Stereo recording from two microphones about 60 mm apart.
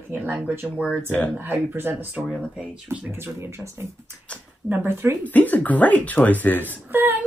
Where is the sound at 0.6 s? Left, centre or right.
Centre.